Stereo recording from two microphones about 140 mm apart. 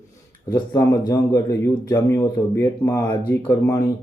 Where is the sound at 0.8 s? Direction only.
30° left (ahead or behind).